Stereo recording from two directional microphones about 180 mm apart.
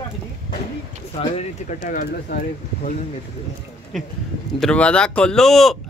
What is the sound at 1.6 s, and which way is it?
Speech, 45° left (ahead or behind).